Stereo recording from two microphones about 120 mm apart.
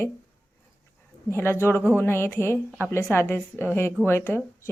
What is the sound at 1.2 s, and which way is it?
Speech, 20° left (ahead or behind).